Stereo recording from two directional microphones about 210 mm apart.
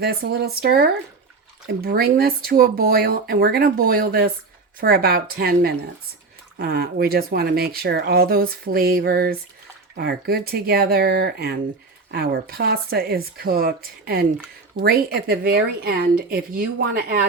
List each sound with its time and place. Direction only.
0.0 s speech: 50° right (ahead or behind)